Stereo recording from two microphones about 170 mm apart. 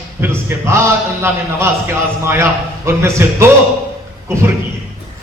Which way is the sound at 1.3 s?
15° right (ahead or behind).